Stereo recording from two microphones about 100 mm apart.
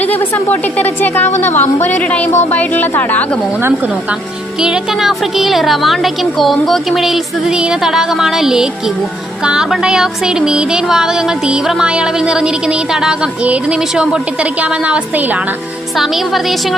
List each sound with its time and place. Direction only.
0.0 s a woman's voice: 15° left (ahead or behind)
4.6 s speech: 5° right (ahead or behind)
9.4 s music: 10° right (ahead or behind)
16.0 s speech: centre (ahead or behind)